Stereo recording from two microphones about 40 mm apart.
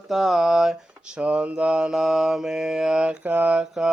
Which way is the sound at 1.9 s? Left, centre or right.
Centre.